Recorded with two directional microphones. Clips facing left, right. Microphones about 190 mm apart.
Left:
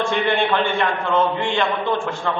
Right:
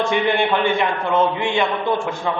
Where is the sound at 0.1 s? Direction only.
10° right (ahead or behind).